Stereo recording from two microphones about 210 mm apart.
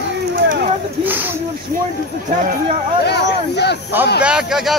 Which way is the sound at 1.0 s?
10° right (ahead or behind).